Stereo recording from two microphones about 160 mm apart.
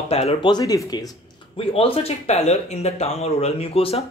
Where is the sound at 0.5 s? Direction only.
25° left (ahead or behind).